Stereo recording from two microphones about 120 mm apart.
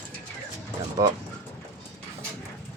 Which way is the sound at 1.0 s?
30° right (ahead or behind).